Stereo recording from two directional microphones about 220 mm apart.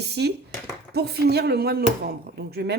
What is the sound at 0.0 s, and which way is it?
Speech, 50° right (ahead or behind).